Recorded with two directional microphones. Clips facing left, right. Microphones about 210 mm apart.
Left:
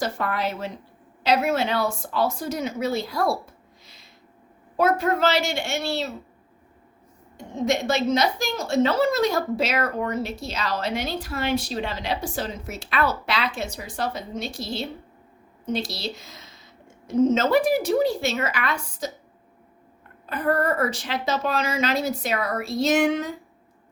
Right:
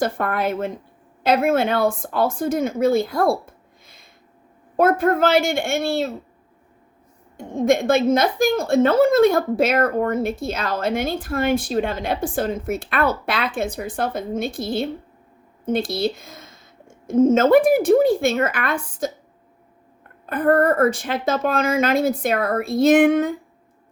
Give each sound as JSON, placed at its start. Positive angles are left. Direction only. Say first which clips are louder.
{"t": 0.0, "sound": "a woman's voice", "louder": "right 4 dB", "side_deg": -55}
{"t": 7.3, "sound": "a woman's voice", "louder": "right 6 dB", "side_deg": -55}
{"t": 20.2, "sound": "a woman's voice", "louder": "right 6 dB", "side_deg": -55}